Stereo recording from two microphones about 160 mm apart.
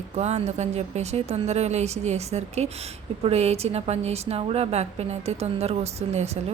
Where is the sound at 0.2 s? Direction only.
40° right (ahead or behind).